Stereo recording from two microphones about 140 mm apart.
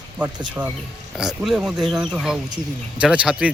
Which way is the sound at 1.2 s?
5° right (ahead or behind).